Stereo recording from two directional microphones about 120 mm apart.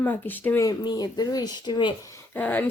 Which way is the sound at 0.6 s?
35° left (ahead or behind).